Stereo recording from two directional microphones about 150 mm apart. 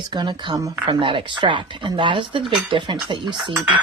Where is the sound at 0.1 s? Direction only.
30° right (ahead or behind).